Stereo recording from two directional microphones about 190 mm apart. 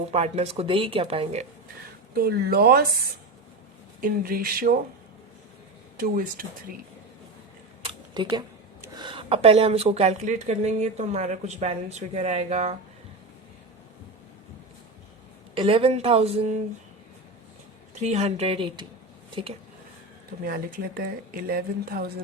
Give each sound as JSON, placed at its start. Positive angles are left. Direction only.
{"t": 0.1, "sound": "a woman's voice", "side_deg": -35}
{"t": 2.1, "sound": "speech", "side_deg": -55}
{"t": 4.0, "sound": "speech", "side_deg": -50}
{"t": 6.0, "sound": "speech", "side_deg": -50}
{"t": 7.8, "sound": "camera", "side_deg": -25}
{"t": 9.0, "sound": "a woman's voice", "side_deg": -25}
{"t": 15.5, "sound": "a woman's voice", "side_deg": -30}
{"t": 18.0, "sound": "a woman's voice", "side_deg": -35}
{"t": 20.4, "sound": "speech", "side_deg": -50}